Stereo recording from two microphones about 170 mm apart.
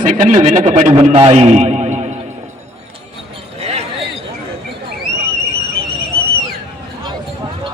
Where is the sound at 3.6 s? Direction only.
40° right (ahead or behind).